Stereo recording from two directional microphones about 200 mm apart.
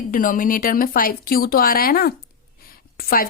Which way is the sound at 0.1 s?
45° left (ahead or behind).